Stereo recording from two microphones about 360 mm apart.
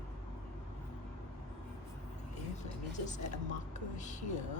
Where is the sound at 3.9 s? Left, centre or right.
Centre.